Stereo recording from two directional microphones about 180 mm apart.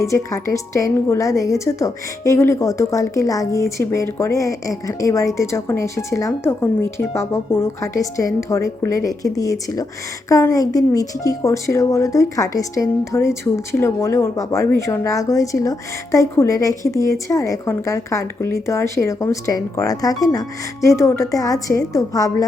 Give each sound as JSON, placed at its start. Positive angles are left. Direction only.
{"t": 0.0, "sound": "a woman's voice", "side_deg": 15}